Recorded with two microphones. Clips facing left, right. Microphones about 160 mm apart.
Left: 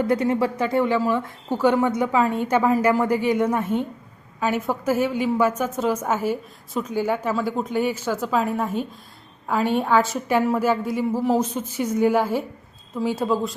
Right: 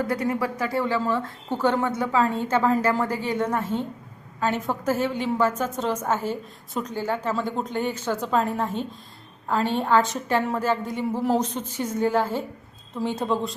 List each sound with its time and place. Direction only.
0.0 s speech: 20° left (ahead or behind); by 13.5 s 5° left (ahead or behind)